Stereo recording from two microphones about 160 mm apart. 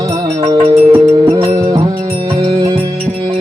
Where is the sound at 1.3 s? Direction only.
25° right (ahead or behind).